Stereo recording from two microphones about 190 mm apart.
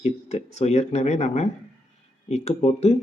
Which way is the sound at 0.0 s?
35° left (ahead or behind).